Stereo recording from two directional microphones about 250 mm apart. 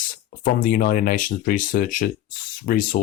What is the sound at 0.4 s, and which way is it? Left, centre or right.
Speech, left.